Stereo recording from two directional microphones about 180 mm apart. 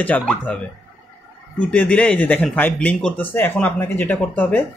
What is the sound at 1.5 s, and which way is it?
Speech, 5° left (ahead or behind).